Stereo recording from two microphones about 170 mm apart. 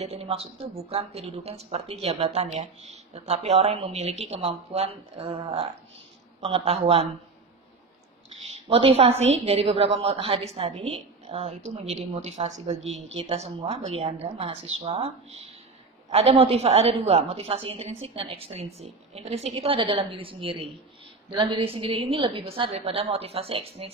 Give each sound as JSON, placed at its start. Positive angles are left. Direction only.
{"t": 0.0, "sound": "speech", "side_deg": -35}
{"t": 8.6, "sound": "speech", "side_deg": -35}